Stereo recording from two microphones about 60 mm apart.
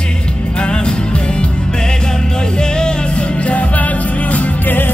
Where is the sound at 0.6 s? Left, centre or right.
Centre.